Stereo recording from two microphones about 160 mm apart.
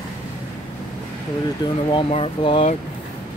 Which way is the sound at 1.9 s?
35° left (ahead or behind).